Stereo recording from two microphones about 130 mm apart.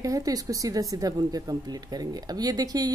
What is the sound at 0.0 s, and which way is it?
A woman's voice, 25° right (ahead or behind).